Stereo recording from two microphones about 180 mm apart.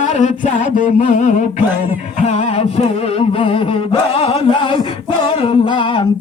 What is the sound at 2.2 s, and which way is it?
Music, 35° left (ahead or behind).